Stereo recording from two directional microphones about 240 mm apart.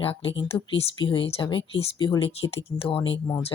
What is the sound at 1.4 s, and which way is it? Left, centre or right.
Speech, centre.